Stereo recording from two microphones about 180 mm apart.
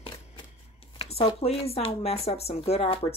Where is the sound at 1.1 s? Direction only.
35° left (ahead or behind).